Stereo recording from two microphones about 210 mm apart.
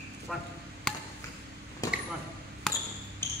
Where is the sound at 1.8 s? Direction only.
15° left (ahead or behind).